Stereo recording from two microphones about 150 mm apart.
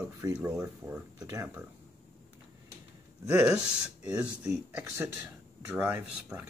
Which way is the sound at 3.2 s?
5° right (ahead or behind).